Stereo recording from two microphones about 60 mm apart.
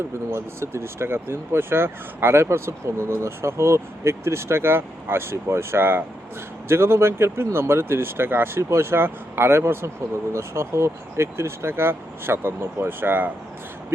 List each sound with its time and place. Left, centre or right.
0.3 s speech: right